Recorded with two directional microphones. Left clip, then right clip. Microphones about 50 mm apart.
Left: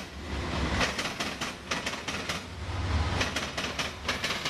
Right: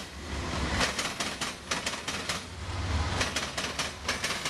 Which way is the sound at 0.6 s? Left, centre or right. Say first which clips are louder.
Even; right.